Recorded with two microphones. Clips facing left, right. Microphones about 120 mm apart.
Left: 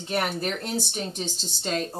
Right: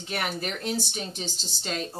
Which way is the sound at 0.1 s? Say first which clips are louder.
Left 4 dB; 40° left (ahead or behind).